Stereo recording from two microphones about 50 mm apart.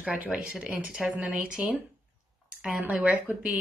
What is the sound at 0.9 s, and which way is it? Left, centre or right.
Speech, centre.